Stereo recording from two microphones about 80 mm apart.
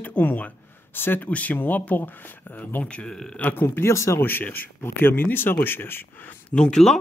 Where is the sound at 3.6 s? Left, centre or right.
Left.